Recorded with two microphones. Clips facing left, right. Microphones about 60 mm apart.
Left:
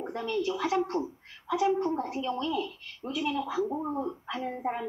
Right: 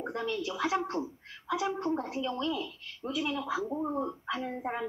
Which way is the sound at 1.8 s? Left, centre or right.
Centre.